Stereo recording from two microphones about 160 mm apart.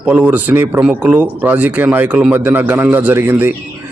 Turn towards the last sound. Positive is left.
turn(degrees=-15)  # may be behind; listen again after turning